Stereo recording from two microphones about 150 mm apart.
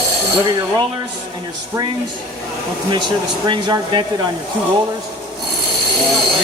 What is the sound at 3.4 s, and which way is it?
Speech, 30° right (ahead or behind).